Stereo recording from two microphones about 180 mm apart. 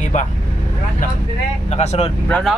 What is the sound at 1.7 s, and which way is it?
Speech, 40° left (ahead or behind).